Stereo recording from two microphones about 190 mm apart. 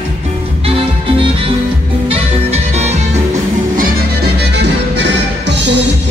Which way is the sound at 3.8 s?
60° right (ahead or behind).